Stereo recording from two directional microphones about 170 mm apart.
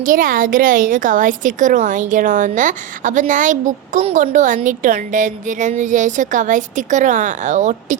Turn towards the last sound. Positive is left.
turn(degrees=-45)  # may be behind; listen again after turning